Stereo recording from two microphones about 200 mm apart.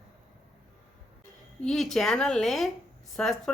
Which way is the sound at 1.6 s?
Centre (ahead or behind).